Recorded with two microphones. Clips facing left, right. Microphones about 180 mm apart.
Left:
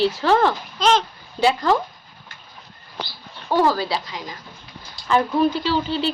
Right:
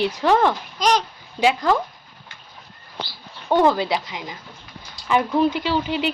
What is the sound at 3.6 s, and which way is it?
A child's voice, 20° right (ahead or behind).